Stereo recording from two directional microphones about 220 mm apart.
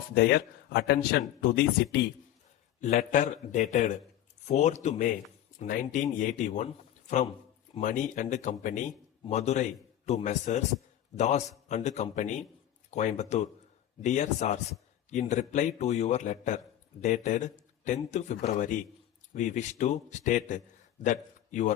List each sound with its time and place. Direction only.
0.1 s speech: 45° left (ahead or behind)
2.8 s a man's voice: 30° left (ahead or behind)
7.8 s a man's voice: 35° left (ahead or behind)